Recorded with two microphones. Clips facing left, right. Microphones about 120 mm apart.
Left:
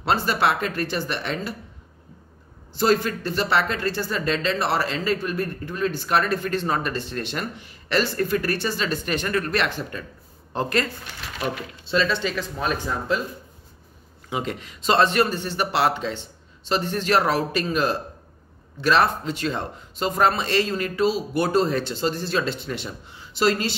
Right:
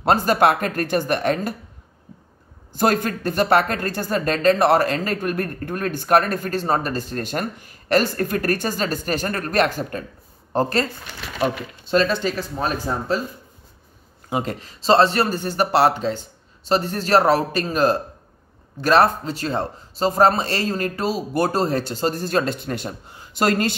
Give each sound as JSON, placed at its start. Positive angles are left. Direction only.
{"t": 0.0, "sound": "speech", "side_deg": -45}
{"t": 2.7, "sound": "speech", "side_deg": -50}
{"t": 11.8, "sound": "a man's voice", "side_deg": -45}
{"t": 14.3, "sound": "a man's voice", "side_deg": -40}